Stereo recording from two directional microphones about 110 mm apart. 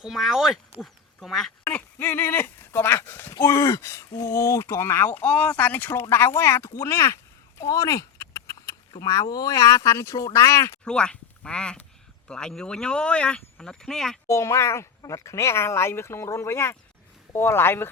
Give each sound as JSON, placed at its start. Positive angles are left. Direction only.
{"t": 0.0, "sound": "speech", "side_deg": -5}
{"t": 1.6, "sound": "speech", "side_deg": 15}
{"t": 7.6, "sound": "a sound", "side_deg": 30}
{"t": 8.9, "sound": "speech", "side_deg": 30}
{"t": 10.8, "sound": "speech", "side_deg": 10}
{"t": 14.3, "sound": "speech", "side_deg": 30}